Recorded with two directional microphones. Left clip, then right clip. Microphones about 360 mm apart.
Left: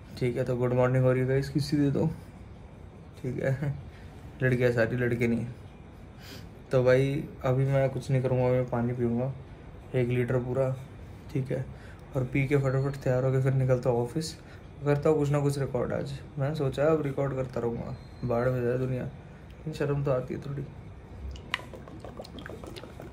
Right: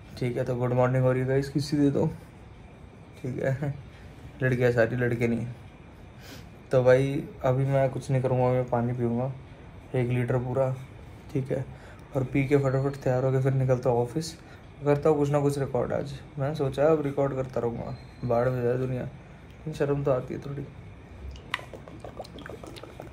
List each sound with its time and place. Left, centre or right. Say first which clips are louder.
0.1 s speech: even; centre
3.3 s speech: right 1 dB; centre
21.5 s chewing: even; centre
22.4 s a sound: right 1 dB; centre